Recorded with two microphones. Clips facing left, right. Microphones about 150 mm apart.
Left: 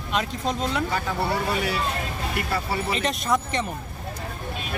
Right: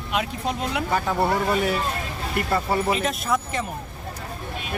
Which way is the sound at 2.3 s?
50° right (ahead or behind).